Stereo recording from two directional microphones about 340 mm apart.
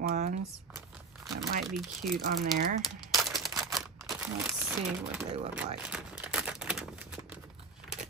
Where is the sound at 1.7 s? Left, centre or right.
Centre.